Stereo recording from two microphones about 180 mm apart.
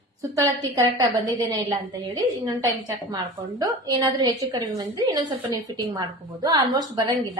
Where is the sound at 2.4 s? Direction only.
20° right (ahead or behind).